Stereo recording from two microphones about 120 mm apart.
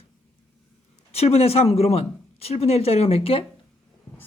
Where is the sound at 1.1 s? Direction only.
60° left (ahead or behind).